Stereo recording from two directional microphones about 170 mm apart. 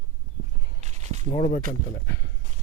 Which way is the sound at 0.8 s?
40° right (ahead or behind).